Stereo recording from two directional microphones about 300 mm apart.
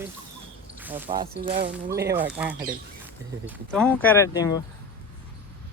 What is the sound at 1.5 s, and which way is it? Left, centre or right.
Speech, right.